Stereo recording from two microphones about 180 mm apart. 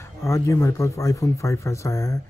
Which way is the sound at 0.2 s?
15° left (ahead or behind).